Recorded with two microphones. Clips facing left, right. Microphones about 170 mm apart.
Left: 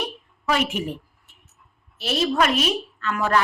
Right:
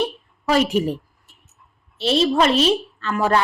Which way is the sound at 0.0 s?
35° right (ahead or behind).